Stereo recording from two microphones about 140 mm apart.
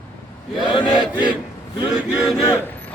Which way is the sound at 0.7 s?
35° left (ahead or behind).